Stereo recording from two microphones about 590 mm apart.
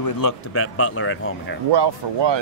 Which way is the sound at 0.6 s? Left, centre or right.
Left.